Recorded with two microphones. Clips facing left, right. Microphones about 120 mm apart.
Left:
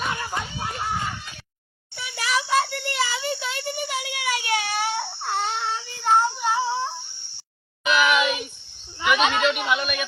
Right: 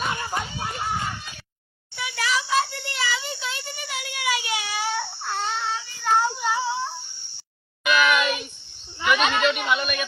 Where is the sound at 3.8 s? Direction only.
45° left (ahead or behind).